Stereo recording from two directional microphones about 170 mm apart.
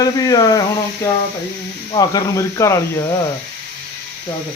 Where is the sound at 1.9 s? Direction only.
20° left (ahead or behind).